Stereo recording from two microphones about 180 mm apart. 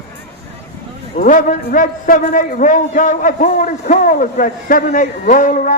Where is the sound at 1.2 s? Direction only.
45° left (ahead or behind).